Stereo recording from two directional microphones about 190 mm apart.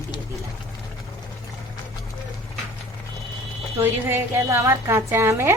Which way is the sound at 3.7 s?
10° right (ahead or behind).